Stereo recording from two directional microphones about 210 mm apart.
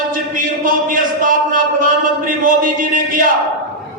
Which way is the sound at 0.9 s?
40° right (ahead or behind).